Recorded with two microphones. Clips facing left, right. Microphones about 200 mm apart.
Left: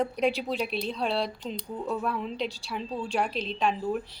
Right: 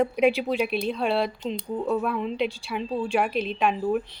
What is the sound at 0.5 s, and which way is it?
Speech, 55° right (ahead or behind).